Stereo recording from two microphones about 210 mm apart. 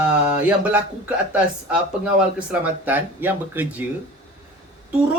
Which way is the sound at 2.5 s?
10° right (ahead or behind).